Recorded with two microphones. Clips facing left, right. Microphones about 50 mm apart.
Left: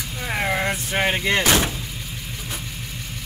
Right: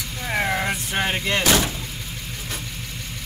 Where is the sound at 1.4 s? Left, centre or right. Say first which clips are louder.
Even; left.